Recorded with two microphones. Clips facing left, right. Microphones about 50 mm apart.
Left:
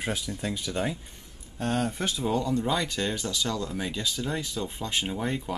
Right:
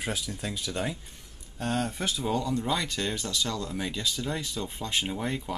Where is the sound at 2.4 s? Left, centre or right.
Centre.